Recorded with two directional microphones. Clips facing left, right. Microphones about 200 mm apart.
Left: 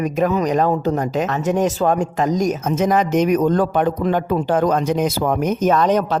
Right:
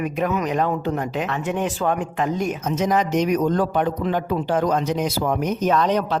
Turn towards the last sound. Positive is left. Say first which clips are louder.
# left 3 dB
turn(degrees=45)  # may be behind; listen again after turning